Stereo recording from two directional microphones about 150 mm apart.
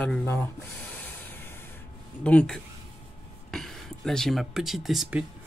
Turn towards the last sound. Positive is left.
turn(degrees=-5)  # may be behind; listen again after turning